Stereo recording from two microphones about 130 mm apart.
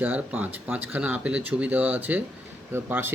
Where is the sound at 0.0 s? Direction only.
15° right (ahead or behind).